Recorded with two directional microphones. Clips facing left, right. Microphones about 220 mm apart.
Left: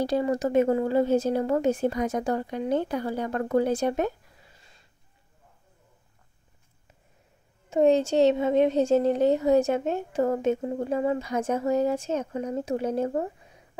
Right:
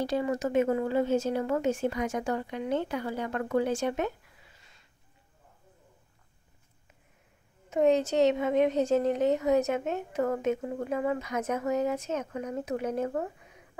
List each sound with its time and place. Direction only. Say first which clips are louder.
0.0 s a woman's voice: left 4 dB; 35° left (ahead or behind)
4.6 s a sound: left 3 dB; 35° left (ahead or behind)
7.7 s a woman's voice: left 3 dB; 30° left (ahead or behind)